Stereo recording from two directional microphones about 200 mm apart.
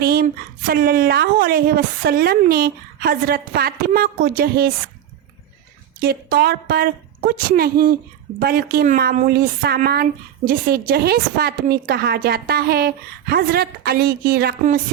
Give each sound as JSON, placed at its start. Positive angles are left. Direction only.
{"t": 0.0, "sound": "a sound", "side_deg": -50}
{"t": 0.7, "sound": "a woman's voice", "side_deg": -50}
{"t": 6.0, "sound": "a woman's voice", "side_deg": -50}